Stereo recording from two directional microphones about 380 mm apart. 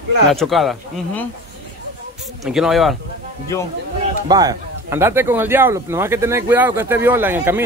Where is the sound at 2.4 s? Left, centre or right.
Centre.